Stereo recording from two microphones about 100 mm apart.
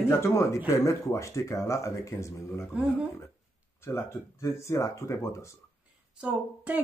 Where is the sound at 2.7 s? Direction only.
10° right (ahead or behind).